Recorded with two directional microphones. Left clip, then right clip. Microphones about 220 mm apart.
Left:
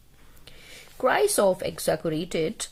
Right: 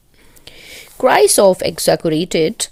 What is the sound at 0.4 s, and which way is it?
Speech, 35° right (ahead or behind).